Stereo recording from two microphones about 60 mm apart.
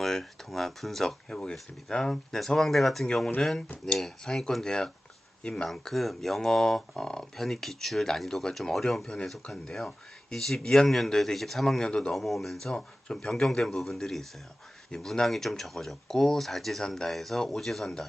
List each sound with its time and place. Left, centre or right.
0.0 s speech: centre
1.3 s speech: centre
5.6 s speech: centre
11.9 s speech: centre
12.1 s speech: centre
12.7 s speech: centre